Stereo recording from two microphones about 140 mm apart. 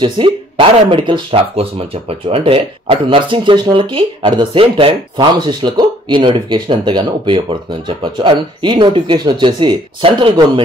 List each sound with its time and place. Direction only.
0.0 s speech: 35° right (ahead or behind)